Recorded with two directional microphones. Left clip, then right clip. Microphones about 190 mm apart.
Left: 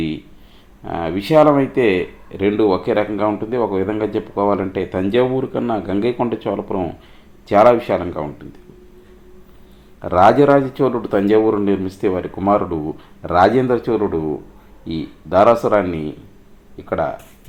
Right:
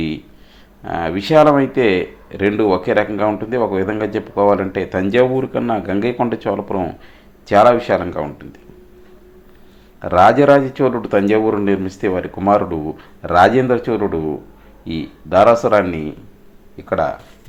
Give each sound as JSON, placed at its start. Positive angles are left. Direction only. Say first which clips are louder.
{"t": 0.9, "sound": "speech", "louder": "right 2 dB", "side_deg": -10}
{"t": 10.0, "sound": "speech", "louder": "right 1 dB", "side_deg": -15}